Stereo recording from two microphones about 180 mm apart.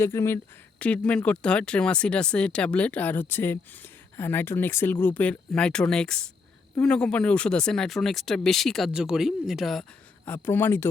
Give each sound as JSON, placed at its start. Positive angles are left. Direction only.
{"t": 0.0, "sound": "speech", "side_deg": 15}
{"t": 10.2, "sound": "speech", "side_deg": 10}